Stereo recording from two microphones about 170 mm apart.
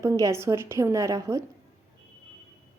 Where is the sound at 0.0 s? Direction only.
15° right (ahead or behind).